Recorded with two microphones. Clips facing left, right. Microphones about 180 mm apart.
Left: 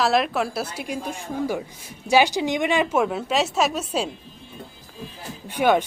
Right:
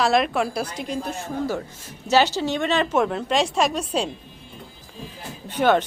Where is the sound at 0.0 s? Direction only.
Centre (ahead or behind).